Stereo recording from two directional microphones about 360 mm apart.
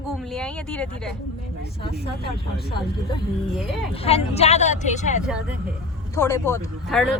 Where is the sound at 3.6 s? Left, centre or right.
Centre.